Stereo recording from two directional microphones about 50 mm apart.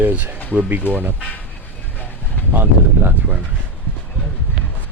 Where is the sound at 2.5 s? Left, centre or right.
Right.